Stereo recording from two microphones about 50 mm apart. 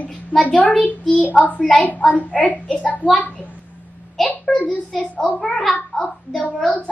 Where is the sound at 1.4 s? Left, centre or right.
Left.